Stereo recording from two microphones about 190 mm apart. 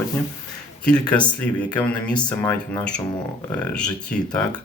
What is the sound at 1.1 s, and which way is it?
Speech, 5° left (ahead or behind).